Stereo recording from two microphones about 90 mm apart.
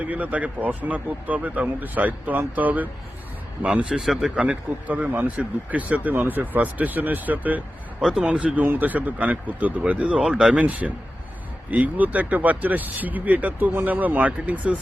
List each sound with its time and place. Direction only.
0.0 s speech: 15° right (ahead or behind)
4.4 s speech: 15° right (ahead or behind)